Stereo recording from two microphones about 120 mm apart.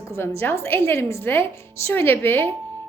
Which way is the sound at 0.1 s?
20° left (ahead or behind).